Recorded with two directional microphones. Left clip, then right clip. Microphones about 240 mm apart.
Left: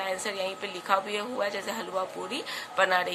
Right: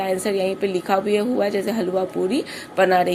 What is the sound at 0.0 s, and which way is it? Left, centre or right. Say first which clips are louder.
Speech: right 9 dB; centre.